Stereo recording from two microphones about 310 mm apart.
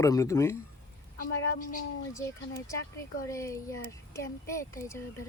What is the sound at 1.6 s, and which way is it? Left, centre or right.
Speech, left.